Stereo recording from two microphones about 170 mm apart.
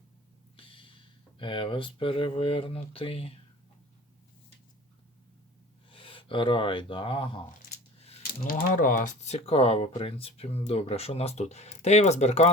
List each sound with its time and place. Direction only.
0.5 s speech: 30° left (ahead or behind)
5.9 s speech: 30° left (ahead or behind)
8.3 s speech: 55° left (ahead or behind)